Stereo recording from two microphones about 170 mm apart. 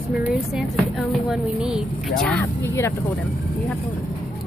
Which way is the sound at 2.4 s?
15° left (ahead or behind).